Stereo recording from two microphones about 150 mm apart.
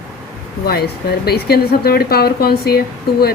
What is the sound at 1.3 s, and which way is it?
A woman's voice, 90° left.